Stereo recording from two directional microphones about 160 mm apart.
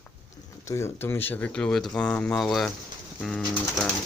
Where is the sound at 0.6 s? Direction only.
15° left (ahead or behind).